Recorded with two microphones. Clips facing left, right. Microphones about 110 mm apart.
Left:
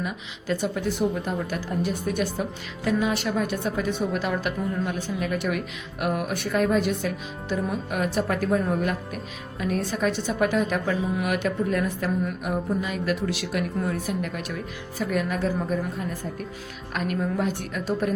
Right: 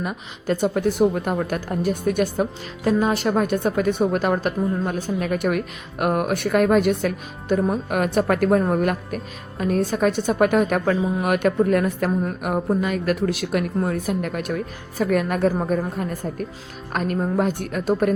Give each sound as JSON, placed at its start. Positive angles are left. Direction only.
{"t": 0.0, "sound": "speech", "side_deg": -50}